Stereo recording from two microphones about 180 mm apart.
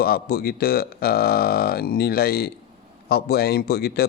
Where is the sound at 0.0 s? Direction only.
60° left (ahead or behind).